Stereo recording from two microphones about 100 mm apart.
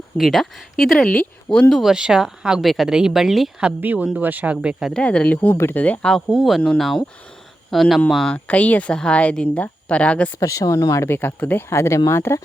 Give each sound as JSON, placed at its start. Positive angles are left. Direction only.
{"t": 0.2, "sound": "speech", "side_deg": 0}
{"t": 1.7, "sound": "speech", "side_deg": -5}
{"t": 3.8, "sound": "speech", "side_deg": -15}
{"t": 4.9, "sound": "speech", "side_deg": 15}
{"t": 10.4, "sound": "speech", "side_deg": 30}